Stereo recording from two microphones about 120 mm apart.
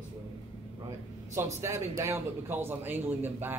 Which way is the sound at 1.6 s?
25° right (ahead or behind).